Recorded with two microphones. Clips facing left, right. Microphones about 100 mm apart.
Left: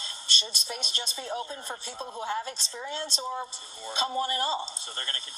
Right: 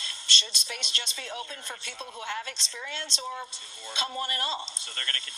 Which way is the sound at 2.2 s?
30° left (ahead or behind).